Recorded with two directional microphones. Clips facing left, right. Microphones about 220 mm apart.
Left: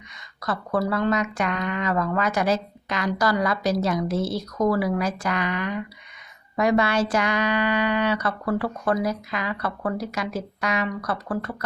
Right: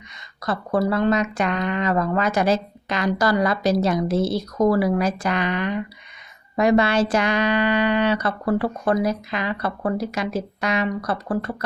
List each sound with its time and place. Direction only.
0.4 s speech: 25° right (ahead or behind)